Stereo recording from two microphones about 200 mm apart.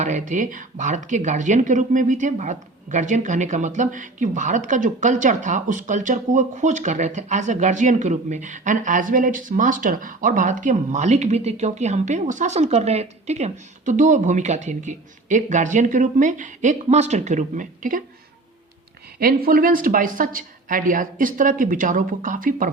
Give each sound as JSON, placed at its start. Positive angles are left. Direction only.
{"t": 0.0, "sound": "speech", "side_deg": -40}
{"t": 19.2, "sound": "a woman's voice", "side_deg": -45}